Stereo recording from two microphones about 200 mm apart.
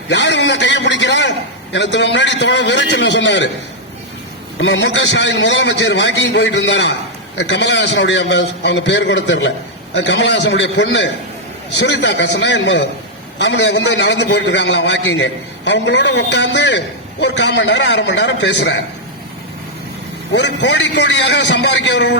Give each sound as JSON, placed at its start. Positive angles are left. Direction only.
{"t": 0.1, "sound": "a man's voice", "side_deg": 60}
{"t": 4.6, "sound": "a man's voice", "side_deg": 65}
{"t": 20.3, "sound": "a man's voice", "side_deg": 60}